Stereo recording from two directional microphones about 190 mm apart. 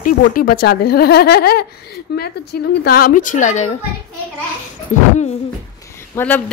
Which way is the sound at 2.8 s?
50° left (ahead or behind).